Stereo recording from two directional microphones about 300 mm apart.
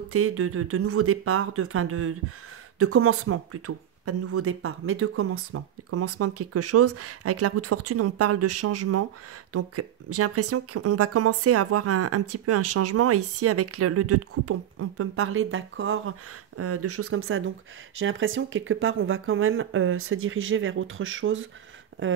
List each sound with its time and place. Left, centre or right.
0.1 s speech: right